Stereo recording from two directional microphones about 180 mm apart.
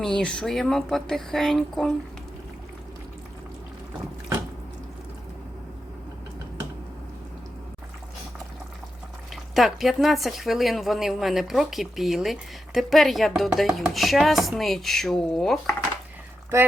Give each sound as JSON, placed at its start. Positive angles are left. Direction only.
{"t": 0.0, "sound": "speech", "side_deg": 5}
{"t": 9.3, "sound": "speech", "side_deg": 0}
{"t": 16.5, "sound": "speech", "side_deg": -15}